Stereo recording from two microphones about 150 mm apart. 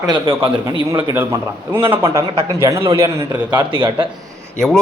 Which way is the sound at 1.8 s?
35° right (ahead or behind).